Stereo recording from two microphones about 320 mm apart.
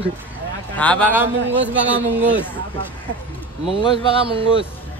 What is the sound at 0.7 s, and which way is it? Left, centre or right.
Speech, centre.